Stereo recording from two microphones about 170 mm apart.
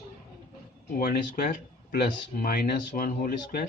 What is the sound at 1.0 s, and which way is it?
Speech, 60° left (ahead or behind).